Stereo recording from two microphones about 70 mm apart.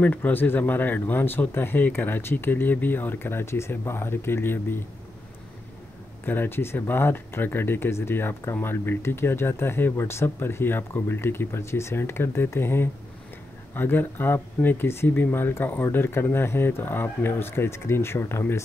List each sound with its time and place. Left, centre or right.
0.0 s speech: left
6.2 s speech: left